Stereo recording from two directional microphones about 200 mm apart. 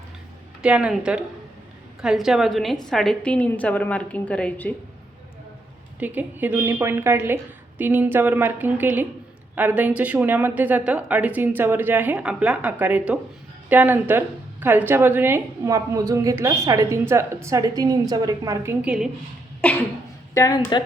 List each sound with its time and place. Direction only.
0.6 s a woman's voice: 5° right (ahead or behind)
6.0 s a woman's voice: 10° right (ahead or behind)
20.3 s speech: 20° left (ahead or behind)